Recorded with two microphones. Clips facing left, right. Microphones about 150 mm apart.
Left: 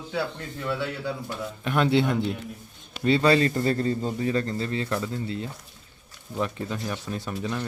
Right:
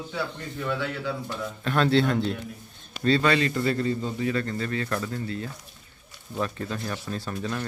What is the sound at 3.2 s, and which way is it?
A man's voice, 35° left (ahead or behind).